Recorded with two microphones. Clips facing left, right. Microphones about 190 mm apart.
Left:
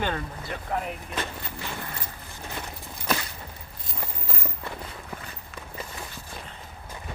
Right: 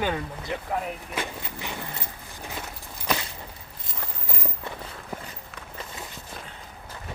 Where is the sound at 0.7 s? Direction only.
Centre (ahead or behind).